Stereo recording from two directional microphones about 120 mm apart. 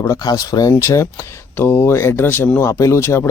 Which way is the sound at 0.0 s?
30° left (ahead or behind).